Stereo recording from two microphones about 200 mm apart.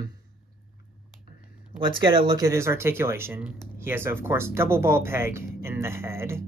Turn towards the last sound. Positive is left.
turn(degrees=-15)  # may be behind; listen again after turning